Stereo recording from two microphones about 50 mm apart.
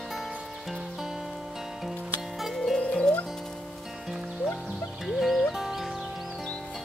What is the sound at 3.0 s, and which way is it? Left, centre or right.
Music, left.